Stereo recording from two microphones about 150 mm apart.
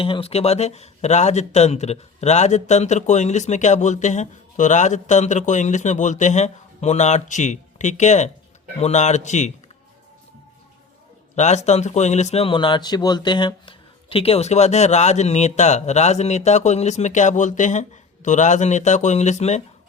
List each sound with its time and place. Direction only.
0.0 s speech: 40° left (ahead or behind)
11.3 s speech: 50° left (ahead or behind)